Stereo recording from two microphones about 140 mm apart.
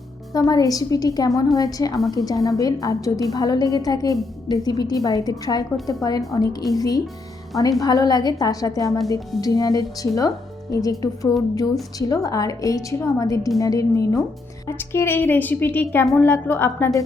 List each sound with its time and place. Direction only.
0.3 s a woman's voice: 25° left (ahead or behind)